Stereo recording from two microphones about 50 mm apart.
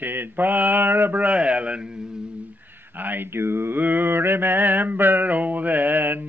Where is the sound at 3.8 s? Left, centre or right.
Right.